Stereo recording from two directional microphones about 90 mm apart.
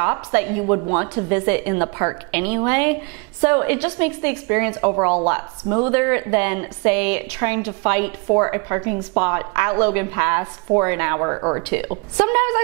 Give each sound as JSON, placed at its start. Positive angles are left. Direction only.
{"t": 0.0, "sound": "a woman's voice", "side_deg": -20}